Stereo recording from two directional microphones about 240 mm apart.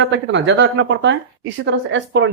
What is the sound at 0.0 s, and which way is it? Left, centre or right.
Speech, right.